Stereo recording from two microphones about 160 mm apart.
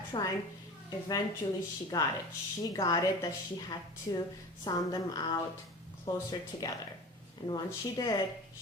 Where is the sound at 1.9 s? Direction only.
25° left (ahead or behind).